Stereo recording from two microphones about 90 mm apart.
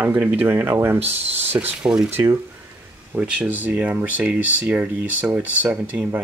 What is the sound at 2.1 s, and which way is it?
Speech, 30° right (ahead or behind).